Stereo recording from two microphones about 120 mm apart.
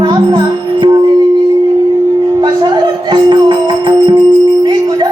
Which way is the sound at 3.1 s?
40° right (ahead or behind).